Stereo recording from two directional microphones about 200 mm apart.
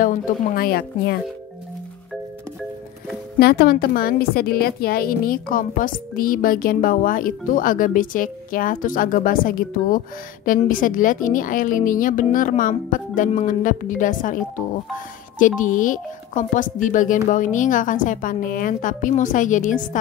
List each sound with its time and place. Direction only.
0.0 s a woman's voice: 45° left (ahead or behind)
3.3 s a woman's voice: 50° left (ahead or behind)